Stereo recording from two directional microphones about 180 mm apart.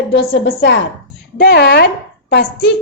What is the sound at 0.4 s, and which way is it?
A woman's voice, 70° left (ahead or behind).